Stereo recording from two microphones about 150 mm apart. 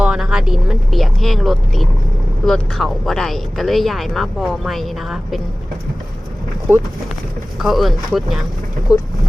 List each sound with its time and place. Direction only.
0.0 s speech: 5° right (ahead or behind)
6.7 s speech: 15° right (ahead or behind)
7.6 s speech: centre (ahead or behind)
8.9 s speech: 20° left (ahead or behind)